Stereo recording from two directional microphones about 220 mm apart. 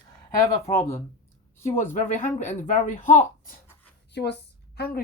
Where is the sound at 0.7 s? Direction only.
15° left (ahead or behind).